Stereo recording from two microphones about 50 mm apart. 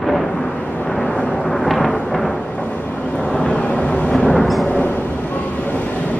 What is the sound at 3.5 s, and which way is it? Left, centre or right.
Vehicle, centre.